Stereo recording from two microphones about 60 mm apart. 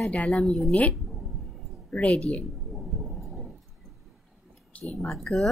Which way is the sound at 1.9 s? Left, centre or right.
Centre.